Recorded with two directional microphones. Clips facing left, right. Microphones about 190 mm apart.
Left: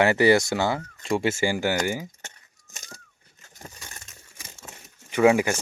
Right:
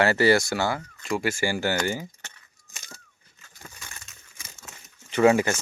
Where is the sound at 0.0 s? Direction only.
20° left (ahead or behind).